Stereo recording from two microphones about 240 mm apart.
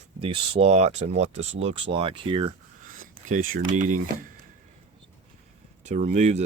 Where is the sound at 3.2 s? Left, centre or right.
Right.